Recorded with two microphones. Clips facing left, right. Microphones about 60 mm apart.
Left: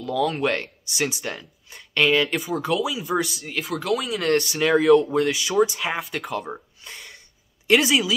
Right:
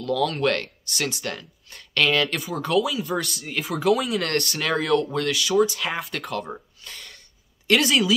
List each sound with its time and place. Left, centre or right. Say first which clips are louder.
0.0 s speech: even; centre